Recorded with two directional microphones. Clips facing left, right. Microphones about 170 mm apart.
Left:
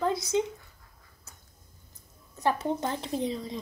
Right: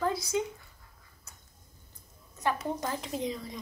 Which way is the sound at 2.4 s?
30° left (ahead or behind).